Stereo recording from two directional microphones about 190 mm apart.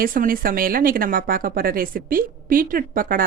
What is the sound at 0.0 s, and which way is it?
Speech, 45° right (ahead or behind).